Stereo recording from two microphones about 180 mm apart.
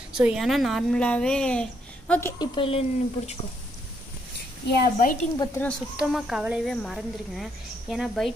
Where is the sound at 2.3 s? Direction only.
25° left (ahead or behind).